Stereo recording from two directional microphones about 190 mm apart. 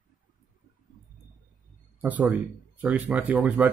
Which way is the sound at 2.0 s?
10° right (ahead or behind).